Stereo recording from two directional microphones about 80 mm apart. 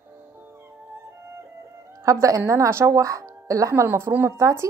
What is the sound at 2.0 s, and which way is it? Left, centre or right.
A woman's voice, right.